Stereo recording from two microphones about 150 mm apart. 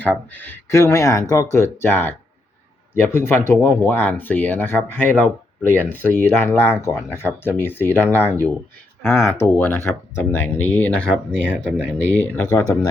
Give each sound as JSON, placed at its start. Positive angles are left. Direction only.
{"t": 0.0, "sound": "speech", "side_deg": 10}
{"t": 11.1, "sound": "speech", "side_deg": -5}
{"t": 12.1, "sound": "speech", "side_deg": 10}